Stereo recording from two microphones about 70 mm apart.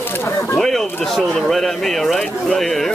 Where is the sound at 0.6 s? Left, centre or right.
Centre.